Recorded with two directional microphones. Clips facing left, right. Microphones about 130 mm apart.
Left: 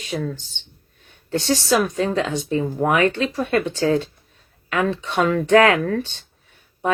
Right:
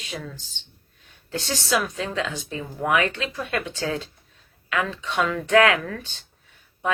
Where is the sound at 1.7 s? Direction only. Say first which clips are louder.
Left 4 dB; 35° left (ahead or behind).